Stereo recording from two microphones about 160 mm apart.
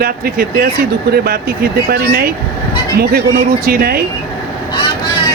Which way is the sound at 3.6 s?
70° right (ahead or behind).